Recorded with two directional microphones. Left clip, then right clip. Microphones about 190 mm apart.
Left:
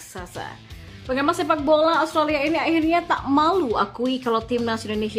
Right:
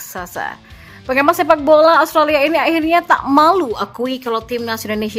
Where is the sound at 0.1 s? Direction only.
20° right (ahead or behind).